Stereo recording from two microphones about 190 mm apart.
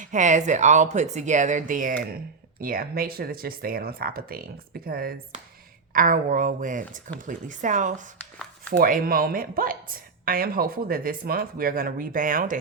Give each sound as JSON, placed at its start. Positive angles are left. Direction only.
{"t": 0.0, "sound": "a woman's voice", "side_deg": -40}